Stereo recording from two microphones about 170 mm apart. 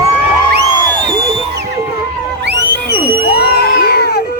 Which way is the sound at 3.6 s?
65° left (ahead or behind).